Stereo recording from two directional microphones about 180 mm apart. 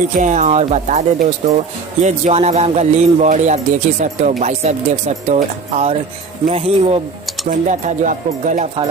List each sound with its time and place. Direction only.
0.2 s speech: 45° right (ahead or behind)